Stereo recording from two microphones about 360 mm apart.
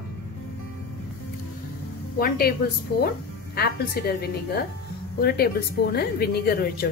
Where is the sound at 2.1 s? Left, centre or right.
Left.